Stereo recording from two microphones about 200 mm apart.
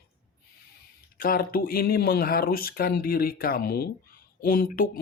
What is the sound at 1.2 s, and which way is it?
Speech, 45° left (ahead or behind).